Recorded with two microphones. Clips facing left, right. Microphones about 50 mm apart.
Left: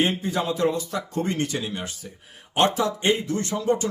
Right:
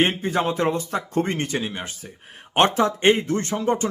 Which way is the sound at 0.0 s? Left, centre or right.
Right.